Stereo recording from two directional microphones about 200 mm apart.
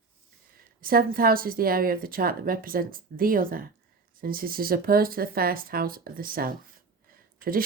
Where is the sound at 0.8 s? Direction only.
45° right (ahead or behind).